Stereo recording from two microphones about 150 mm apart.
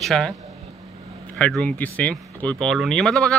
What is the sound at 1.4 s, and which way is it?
Speech, 5° left (ahead or behind).